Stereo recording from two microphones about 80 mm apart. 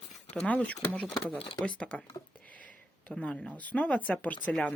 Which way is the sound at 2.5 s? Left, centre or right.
Centre.